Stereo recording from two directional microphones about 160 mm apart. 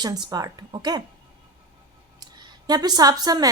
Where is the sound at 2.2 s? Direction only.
25° right (ahead or behind).